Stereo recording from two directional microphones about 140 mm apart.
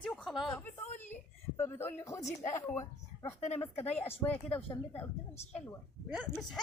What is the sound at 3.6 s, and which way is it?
Speech, 50° left (ahead or behind).